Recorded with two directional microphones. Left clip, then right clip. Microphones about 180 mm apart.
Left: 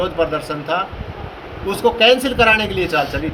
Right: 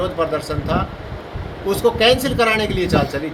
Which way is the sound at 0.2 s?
5° right (ahead or behind).